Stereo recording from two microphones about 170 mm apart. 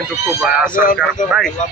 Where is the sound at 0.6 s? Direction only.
55° left (ahead or behind).